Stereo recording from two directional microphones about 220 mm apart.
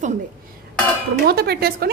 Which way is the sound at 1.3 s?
45° right (ahead or behind).